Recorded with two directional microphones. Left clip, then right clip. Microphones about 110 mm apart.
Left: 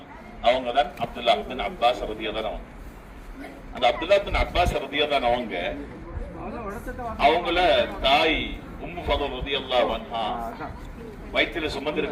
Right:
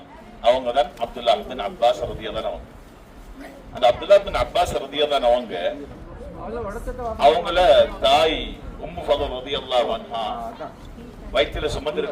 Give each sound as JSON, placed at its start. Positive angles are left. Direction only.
{"t": 0.4, "sound": "a man's voice", "side_deg": -30}
{"t": 3.8, "sound": "a man's voice", "side_deg": -30}
{"t": 7.2, "sound": "a man's voice", "side_deg": -30}
{"t": 11.3, "sound": "a man's voice", "side_deg": -30}